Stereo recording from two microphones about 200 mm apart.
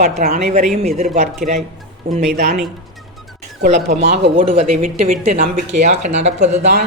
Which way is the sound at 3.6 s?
35° right (ahead or behind).